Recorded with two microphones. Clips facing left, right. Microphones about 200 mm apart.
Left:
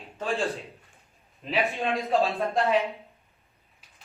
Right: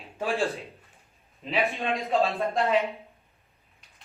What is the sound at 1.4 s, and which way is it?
Speech, centre (ahead or behind).